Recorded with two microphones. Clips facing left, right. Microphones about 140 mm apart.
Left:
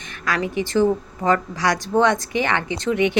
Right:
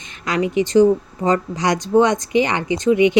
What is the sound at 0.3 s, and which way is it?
Speech, 15° right (ahead or behind).